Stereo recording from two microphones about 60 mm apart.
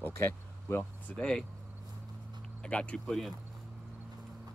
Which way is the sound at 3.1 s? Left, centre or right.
Centre.